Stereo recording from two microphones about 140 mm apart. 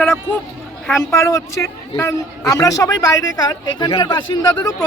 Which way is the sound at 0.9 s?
20° left (ahead or behind).